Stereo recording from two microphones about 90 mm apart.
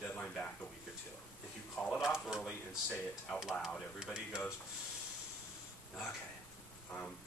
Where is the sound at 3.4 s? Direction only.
5° right (ahead or behind).